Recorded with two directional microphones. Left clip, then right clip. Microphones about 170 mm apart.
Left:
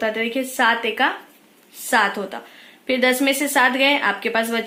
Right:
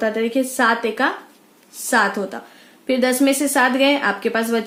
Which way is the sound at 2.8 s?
55° right (ahead or behind).